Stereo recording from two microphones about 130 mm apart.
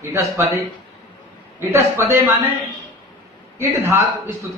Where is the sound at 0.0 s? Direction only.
20° right (ahead or behind).